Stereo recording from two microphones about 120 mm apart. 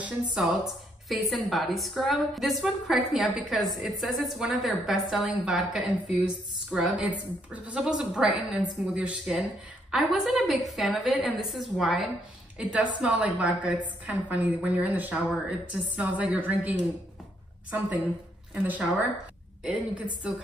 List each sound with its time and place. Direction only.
0.0 s a woman's voice: 5° right (ahead or behind)